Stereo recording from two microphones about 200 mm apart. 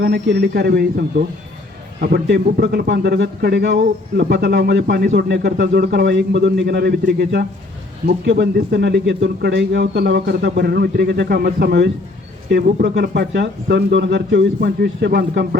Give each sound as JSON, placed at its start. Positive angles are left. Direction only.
{"t": 0.0, "sound": "speech", "side_deg": -55}